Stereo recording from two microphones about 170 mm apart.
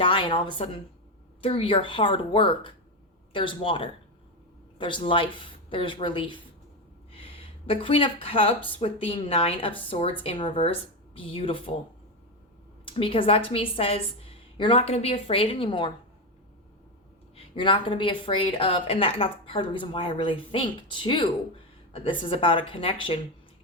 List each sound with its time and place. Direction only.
0.0 s a woman's voice: 30° left (ahead or behind)
12.8 s a woman's voice: 30° left (ahead or behind)
17.3 s a woman's voice: 30° left (ahead or behind)